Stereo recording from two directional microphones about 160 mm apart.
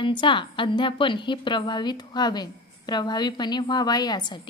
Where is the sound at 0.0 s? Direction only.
30° left (ahead or behind).